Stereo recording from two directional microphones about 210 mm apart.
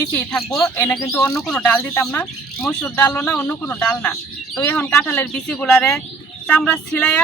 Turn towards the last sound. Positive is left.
turn(degrees=5)  # may be behind; listen again after turning